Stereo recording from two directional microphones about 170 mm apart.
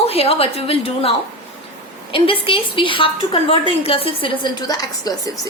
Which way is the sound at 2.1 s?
30° left (ahead or behind).